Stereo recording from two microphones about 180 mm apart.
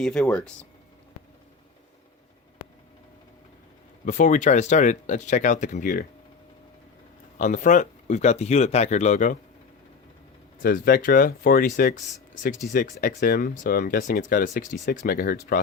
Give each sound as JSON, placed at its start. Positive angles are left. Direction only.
{"t": 0.0, "sound": "speech", "side_deg": 5}
{"t": 4.0, "sound": "speech", "side_deg": 45}
{"t": 7.3, "sound": "speech", "side_deg": 45}
{"t": 10.6, "sound": "speech", "side_deg": 55}